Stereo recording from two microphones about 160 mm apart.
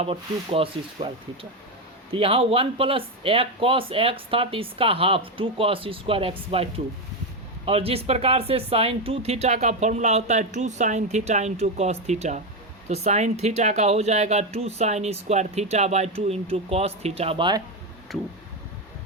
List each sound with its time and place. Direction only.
0.0 s speech: 35° right (ahead or behind)